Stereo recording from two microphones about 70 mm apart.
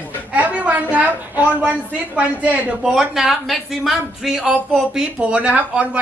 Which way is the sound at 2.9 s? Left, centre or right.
Centre.